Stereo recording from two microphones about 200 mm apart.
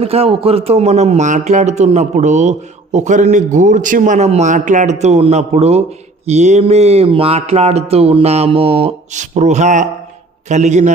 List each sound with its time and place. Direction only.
0.0 s a man's voice: 30° right (ahead or behind)